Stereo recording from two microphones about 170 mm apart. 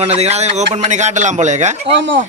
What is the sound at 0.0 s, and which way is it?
A man's voice, 40° right (ahead or behind).